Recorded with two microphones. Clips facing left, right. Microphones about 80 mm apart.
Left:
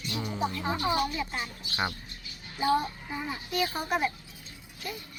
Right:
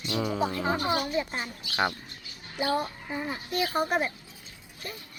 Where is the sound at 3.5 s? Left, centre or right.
Right.